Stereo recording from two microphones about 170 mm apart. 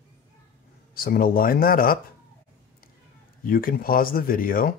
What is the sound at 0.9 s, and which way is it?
Speech, 60° left (ahead or behind).